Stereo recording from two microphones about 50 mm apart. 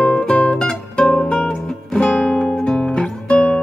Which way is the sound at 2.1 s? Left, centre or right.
Left.